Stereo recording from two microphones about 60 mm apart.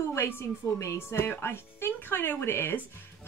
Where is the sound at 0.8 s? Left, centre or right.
Left.